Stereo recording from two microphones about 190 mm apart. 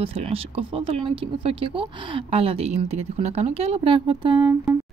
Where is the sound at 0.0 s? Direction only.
30° right (ahead or behind).